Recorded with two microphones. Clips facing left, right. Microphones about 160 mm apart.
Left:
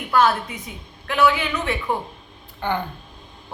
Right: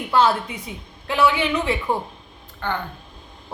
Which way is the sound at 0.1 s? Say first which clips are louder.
Even; 25° right (ahead or behind).